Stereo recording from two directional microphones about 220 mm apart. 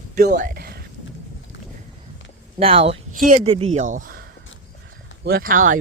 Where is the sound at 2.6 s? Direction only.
25° right (ahead or behind).